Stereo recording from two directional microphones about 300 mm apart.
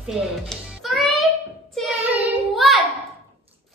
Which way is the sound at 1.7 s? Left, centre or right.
Centre.